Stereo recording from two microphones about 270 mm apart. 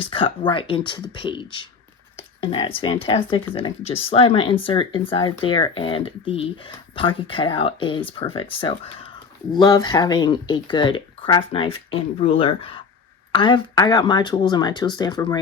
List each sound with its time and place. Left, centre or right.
0.1 s speech: centre